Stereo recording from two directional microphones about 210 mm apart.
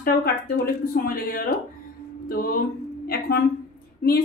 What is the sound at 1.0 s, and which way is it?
A woman's voice, 45° left (ahead or behind).